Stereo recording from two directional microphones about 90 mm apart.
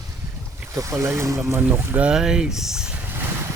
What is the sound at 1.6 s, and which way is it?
Speech, 15° right (ahead or behind).